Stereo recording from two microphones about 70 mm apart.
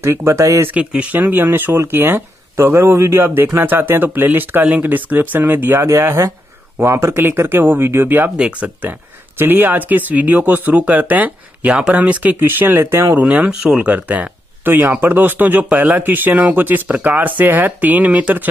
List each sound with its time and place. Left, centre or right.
0.0 s speech: right
0.7 s speech: centre
5.8 s speech: right
8.4 s speech: centre
9.4 s speech: right
12.4 s speech: right
13.2 s speech: centre